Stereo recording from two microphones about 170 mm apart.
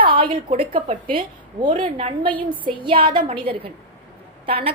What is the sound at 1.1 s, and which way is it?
A woman's voice, 30° right (ahead or behind).